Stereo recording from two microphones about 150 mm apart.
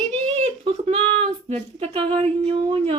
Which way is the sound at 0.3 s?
45° right (ahead or behind).